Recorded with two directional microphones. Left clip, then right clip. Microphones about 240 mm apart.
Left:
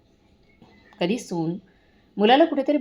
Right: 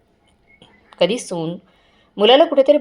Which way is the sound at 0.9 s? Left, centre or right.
Right.